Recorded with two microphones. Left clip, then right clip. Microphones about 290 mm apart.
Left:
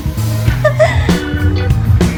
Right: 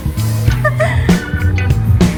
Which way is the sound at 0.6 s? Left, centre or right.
Centre.